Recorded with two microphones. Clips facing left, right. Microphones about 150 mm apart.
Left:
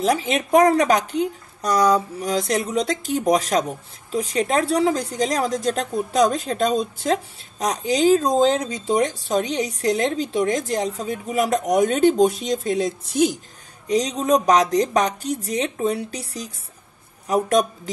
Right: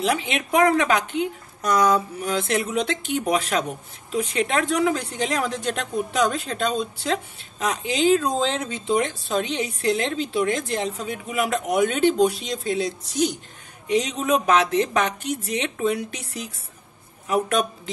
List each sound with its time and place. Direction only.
0.0 s a woman's voice: 40° left (ahead or behind)
13.8 s a woman's voice: 35° left (ahead or behind)